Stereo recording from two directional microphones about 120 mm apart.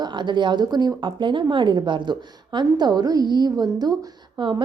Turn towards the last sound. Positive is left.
turn(degrees=-35)  # may be behind; listen again after turning